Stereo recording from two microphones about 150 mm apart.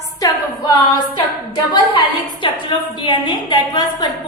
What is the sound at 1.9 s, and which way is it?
A woman's voice, 35° left (ahead or behind).